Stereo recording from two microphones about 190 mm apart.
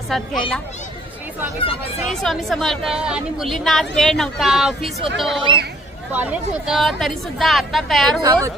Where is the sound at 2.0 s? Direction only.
Centre (ahead or behind).